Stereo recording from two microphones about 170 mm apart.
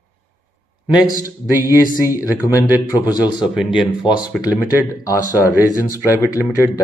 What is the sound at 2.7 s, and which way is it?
Speech, 10° right (ahead or behind).